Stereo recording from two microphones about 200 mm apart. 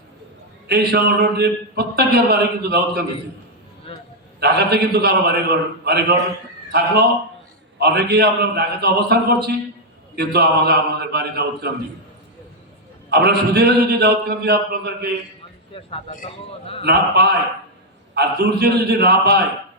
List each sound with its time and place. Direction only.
0.7 s a man's voice: 55° right (ahead or behind)
3.9 s a sound: 30° left (ahead or behind)
4.4 s a man's voice: 55° right (ahead or behind)
10.2 s a man's voice: 55° right (ahead or behind)
13.1 s a man's voice: 55° right (ahead or behind)
15.7 s a man's voice: 25° left (ahead or behind)
16.8 s a man's voice: 55° right (ahead or behind)